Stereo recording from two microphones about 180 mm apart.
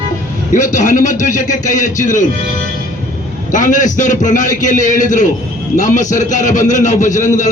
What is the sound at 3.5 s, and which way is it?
A man's voice, 45° left (ahead or behind).